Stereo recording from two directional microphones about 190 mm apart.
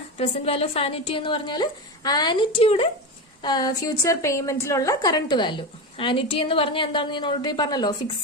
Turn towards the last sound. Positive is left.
turn(degrees=20)  # may be behind; listen again after turning